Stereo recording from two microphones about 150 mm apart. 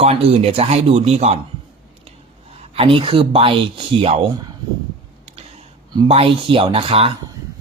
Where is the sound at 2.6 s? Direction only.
40° right (ahead or behind).